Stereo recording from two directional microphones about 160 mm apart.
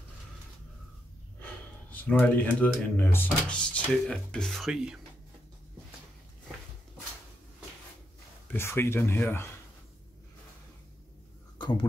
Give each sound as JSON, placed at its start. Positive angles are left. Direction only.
{"t": 1.4, "sound": "speech", "side_deg": 10}
{"t": 8.5, "sound": "speech", "side_deg": 15}
{"t": 11.5, "sound": "a sound", "side_deg": 30}